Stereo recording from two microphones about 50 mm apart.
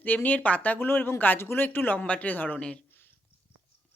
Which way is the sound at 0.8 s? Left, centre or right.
Left.